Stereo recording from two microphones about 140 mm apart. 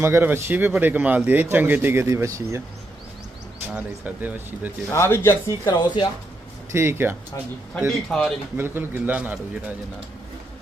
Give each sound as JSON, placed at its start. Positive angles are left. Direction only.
{"t": 0.0, "sound": "a man's voice", "side_deg": -15}
{"t": 3.8, "sound": "a man's voice", "side_deg": -10}
{"t": 4.9, "sound": "speech", "side_deg": 20}
{"t": 5.6, "sound": "speech", "side_deg": 35}
{"t": 6.7, "sound": "a man's voice", "side_deg": -15}
{"t": 7.9, "sound": "speech", "side_deg": 5}
{"t": 8.5, "sound": "a man's voice", "side_deg": -15}